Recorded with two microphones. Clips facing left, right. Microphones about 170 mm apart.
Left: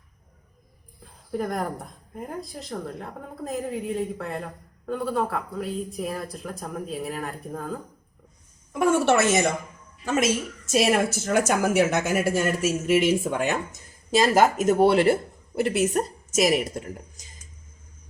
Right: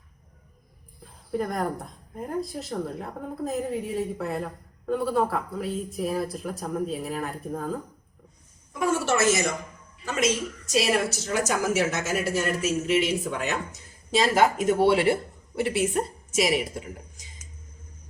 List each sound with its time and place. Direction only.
1.3 s speech: centre (ahead or behind)
8.7 s a woman's voice: 60° left (ahead or behind)
10.1 s a woman's voice: 50° left (ahead or behind)